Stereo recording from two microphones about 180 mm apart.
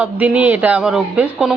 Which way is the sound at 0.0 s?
10° right (ahead or behind).